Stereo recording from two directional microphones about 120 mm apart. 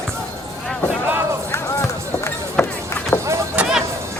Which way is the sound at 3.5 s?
5° right (ahead or behind).